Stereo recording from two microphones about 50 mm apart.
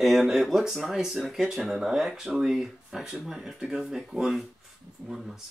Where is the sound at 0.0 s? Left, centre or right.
Centre.